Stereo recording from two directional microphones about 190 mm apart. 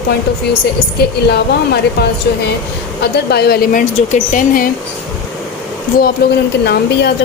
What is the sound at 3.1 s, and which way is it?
Speech, 60° left (ahead or behind).